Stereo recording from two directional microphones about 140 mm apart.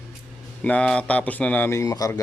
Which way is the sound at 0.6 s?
10° left (ahead or behind).